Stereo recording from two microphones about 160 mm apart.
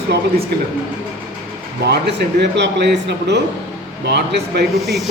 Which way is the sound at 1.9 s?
90° right.